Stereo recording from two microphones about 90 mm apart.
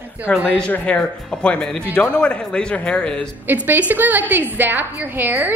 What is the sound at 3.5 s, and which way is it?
A woman's voice, 20° right (ahead or behind).